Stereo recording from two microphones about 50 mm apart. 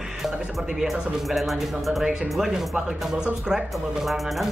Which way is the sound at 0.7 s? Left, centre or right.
Centre.